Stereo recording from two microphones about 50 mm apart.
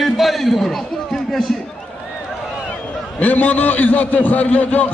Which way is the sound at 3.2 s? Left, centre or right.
Left.